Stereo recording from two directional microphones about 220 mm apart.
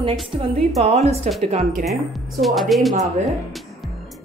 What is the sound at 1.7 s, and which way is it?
Speech, centre (ahead or behind).